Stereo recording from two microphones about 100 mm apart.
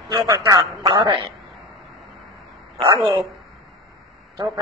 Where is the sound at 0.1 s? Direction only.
35° right (ahead or behind).